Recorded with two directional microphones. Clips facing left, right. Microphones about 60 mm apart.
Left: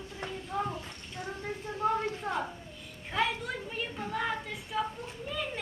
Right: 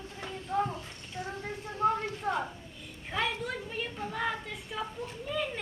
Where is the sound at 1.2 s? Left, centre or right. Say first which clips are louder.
Right 2 dB; left.